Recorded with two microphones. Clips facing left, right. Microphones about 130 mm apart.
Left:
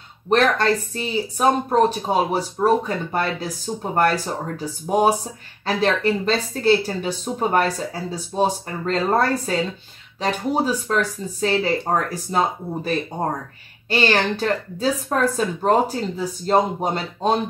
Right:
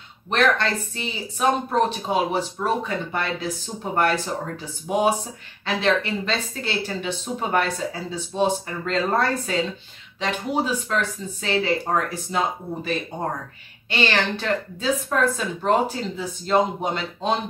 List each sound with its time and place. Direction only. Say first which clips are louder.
0.3 s speech: left 3 dB; 40° left (ahead or behind)